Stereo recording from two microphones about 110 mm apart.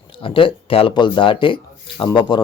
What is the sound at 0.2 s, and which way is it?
A man's voice, 55° left (ahead or behind).